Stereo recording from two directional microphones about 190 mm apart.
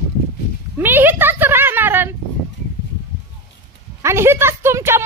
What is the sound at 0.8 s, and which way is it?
Speech, 10° right (ahead or behind).